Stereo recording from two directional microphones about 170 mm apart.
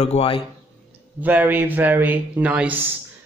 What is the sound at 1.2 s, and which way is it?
A man's voice, 10° right (ahead or behind).